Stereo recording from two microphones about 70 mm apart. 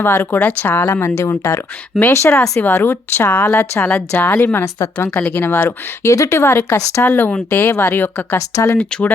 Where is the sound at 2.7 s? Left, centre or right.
Left.